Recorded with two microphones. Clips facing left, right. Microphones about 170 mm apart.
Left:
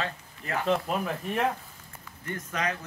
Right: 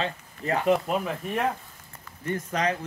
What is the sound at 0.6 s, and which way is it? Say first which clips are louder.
Speech: right 3 dB; 5° right (ahead or behind).